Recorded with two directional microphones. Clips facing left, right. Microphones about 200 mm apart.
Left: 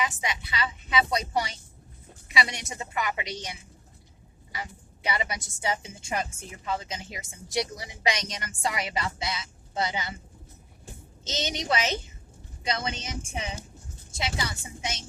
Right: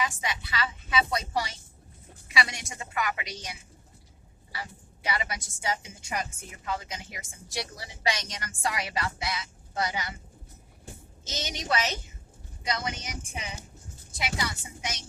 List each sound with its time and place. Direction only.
0.0 s a woman's voice: 20° left (ahead or behind)
5.0 s a woman's voice: 20° left (ahead or behind)
11.2 s a woman's voice: 20° left (ahead or behind)